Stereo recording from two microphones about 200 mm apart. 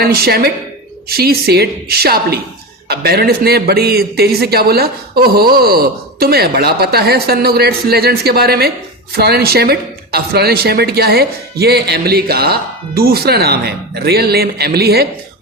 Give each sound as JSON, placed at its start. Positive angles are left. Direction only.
{"t": 0.0, "sound": "speech", "side_deg": -50}